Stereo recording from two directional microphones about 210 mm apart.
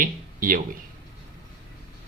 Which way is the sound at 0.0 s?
40° right (ahead or behind).